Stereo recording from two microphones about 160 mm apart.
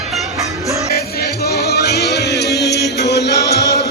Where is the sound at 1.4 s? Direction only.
85° left.